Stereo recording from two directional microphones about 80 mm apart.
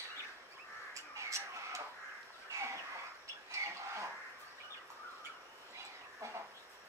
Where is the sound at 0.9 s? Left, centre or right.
Right.